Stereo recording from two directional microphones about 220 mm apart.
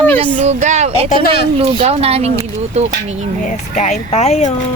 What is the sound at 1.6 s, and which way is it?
Speech, 25° right (ahead or behind).